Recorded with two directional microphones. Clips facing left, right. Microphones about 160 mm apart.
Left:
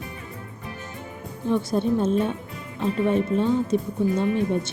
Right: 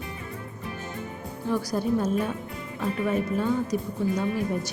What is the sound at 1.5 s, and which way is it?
A woman's voice, 25° left (ahead or behind).